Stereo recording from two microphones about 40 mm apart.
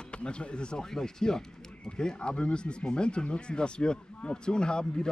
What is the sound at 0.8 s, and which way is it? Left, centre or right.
Speech, centre.